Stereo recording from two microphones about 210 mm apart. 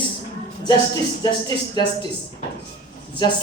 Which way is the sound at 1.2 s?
20° left (ahead or behind).